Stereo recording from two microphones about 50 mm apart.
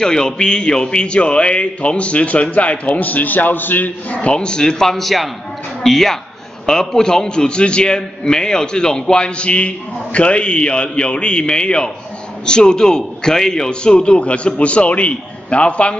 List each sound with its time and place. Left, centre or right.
0.0 s a man's voice: centre; by 3.9 s left
4.1 s a man's voice: left